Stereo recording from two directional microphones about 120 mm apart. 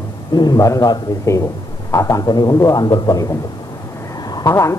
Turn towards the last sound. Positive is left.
turn(degrees=25)  # may be behind; listen again after turning